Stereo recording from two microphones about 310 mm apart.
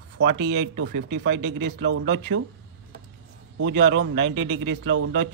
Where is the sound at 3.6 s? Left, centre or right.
Right.